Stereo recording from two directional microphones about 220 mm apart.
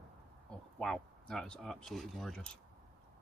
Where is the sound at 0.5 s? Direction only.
5° left (ahead or behind).